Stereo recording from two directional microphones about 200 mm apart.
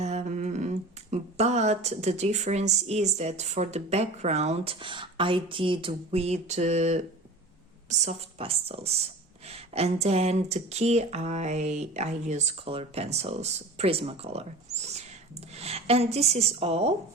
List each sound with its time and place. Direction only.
0.0 s speech: 35° right (ahead or behind)